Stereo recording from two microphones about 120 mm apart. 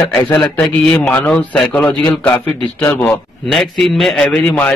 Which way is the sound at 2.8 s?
25° left (ahead or behind).